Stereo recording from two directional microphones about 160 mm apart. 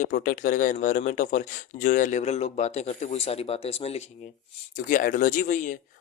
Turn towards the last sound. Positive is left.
turn(degrees=50)  # may be behind; listen again after turning